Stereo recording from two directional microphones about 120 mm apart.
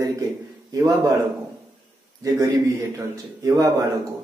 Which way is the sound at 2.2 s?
30° right (ahead or behind).